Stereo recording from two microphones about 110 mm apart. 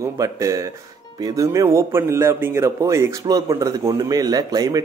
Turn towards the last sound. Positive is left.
turn(degrees=-35)  # may be behind; listen again after turning